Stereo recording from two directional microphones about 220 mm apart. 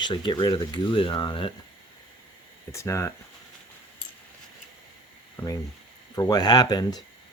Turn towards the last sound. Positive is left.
turn(degrees=20)  # may be behind; listen again after turning